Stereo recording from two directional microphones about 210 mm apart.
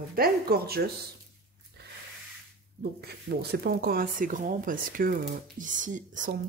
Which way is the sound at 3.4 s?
50° right (ahead or behind).